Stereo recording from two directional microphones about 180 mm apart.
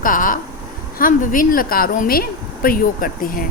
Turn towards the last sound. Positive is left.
turn(degrees=50)  # may be behind; listen again after turning